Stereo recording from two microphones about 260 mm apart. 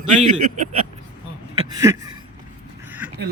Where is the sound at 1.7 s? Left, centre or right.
Centre.